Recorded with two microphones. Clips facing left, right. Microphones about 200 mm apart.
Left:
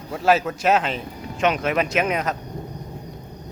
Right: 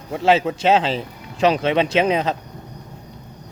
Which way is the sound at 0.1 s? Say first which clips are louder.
Right 2 dB; 25° right (ahead or behind).